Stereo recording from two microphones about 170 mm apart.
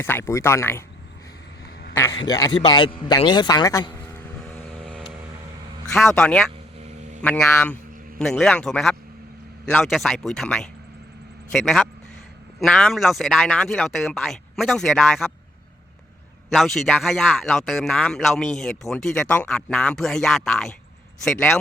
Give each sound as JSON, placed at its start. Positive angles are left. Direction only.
{"t": 0.0, "sound": "speech", "side_deg": 15}
{"t": 2.1, "sound": "a man's voice", "side_deg": 25}
{"t": 6.1, "sound": "speech", "side_deg": 5}
{"t": 8.2, "sound": "speech", "side_deg": 0}
{"t": 16.5, "sound": "speech", "side_deg": 0}